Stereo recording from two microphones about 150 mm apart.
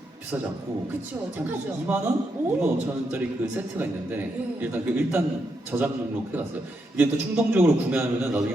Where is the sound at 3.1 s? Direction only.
10° right (ahead or behind).